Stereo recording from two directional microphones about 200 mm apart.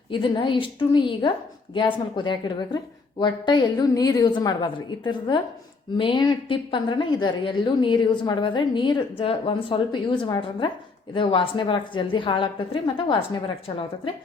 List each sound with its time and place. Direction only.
0.1 s a woman's voice: 25° left (ahead or behind)